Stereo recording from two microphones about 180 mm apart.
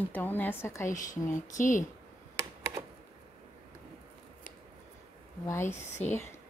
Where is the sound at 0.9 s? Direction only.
45° left (ahead or behind).